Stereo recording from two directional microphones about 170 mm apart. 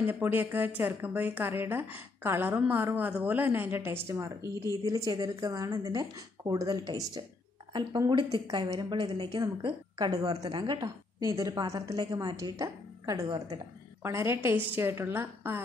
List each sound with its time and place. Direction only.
0.0 s a woman's voice: 10° right (ahead or behind)